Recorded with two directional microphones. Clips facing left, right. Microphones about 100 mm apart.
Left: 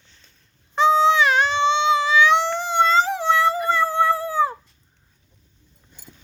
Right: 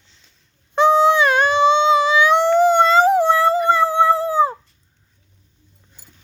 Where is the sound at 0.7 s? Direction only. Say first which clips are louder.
Right 3 dB; 55° right (ahead or behind).